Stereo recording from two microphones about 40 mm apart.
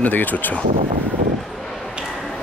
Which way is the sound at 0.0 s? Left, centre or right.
Left.